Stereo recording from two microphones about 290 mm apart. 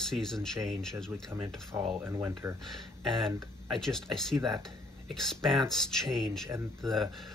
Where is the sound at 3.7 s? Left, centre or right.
Centre.